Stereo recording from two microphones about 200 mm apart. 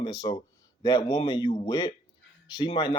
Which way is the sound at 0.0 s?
20° left (ahead or behind).